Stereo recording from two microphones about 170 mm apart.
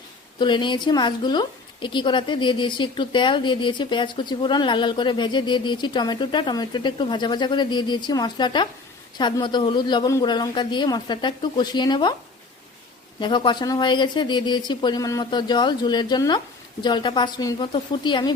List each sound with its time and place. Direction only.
0.3 s a woman's voice: 25° left (ahead or behind)
13.1 s a woman's voice: 30° left (ahead or behind)